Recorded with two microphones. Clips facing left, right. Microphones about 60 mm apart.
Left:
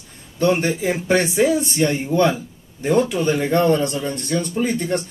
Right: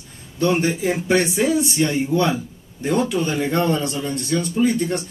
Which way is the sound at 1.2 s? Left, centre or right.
Centre.